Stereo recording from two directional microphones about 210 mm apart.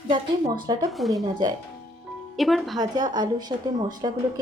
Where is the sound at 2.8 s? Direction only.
20° right (ahead or behind).